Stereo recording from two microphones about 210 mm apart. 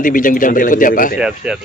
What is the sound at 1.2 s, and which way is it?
Speech, 5° right (ahead or behind).